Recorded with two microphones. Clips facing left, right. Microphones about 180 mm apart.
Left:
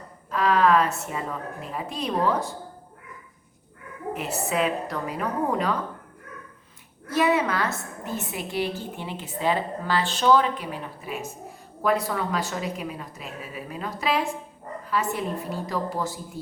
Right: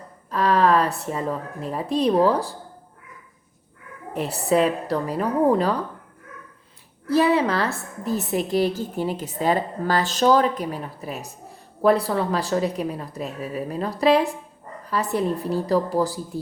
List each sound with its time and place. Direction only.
0.3 s a woman's voice: 35° right (ahead or behind)
4.1 s a woman's voice: 35° right (ahead or behind)
7.1 s a woman's voice: 30° right (ahead or behind)